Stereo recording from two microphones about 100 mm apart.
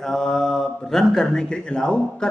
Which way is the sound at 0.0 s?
5° left (ahead or behind).